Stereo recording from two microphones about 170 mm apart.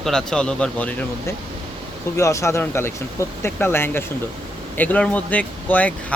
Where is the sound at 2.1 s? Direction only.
15° left (ahead or behind).